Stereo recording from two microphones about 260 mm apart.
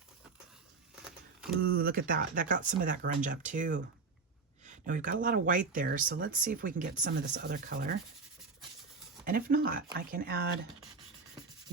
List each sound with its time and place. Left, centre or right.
1.5 s speech: right
9.2 s speech: right